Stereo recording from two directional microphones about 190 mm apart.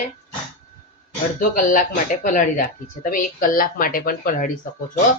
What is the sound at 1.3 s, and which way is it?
Speech, 45° left (ahead or behind).